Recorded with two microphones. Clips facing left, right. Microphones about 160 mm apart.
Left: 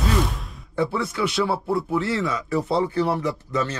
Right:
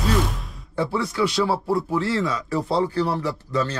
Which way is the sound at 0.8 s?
20° left (ahead or behind).